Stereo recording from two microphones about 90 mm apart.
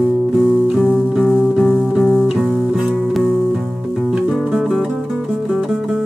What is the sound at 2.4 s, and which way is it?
Music, 20° right (ahead or behind).